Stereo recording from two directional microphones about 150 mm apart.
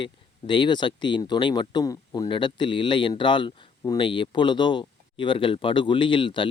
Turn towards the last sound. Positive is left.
turn(degrees=35)  # may be behind; listen again after turning